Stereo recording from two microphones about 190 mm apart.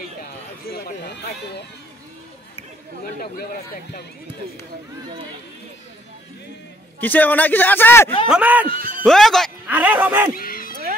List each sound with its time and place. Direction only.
0.7 s speech: 55° left (ahead or behind)
7.0 s a man's voice: 10° left (ahead or behind)
8.3 s speech: 10° right (ahead or behind)
8.7 s a man's voice: 50° right (ahead or behind)
9.0 s a man's voice: centre (ahead or behind)
9.7 s speech: 10° right (ahead or behind)
10.3 s a sound: 50° left (ahead or behind)